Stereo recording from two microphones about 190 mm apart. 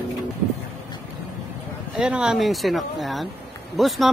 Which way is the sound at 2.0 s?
5° right (ahead or behind).